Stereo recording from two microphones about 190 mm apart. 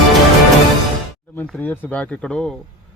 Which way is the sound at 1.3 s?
10° left (ahead or behind).